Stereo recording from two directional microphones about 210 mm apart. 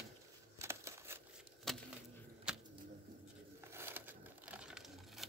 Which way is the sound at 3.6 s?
10° right (ahead or behind).